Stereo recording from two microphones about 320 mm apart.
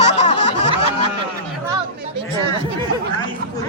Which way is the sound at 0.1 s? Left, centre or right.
Left.